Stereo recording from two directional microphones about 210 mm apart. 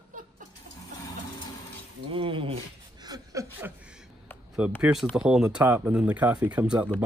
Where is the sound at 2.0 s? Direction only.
25° right (ahead or behind).